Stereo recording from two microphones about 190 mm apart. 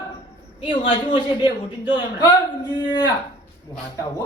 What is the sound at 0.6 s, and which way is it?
A man's voice, 25° left (ahead or behind).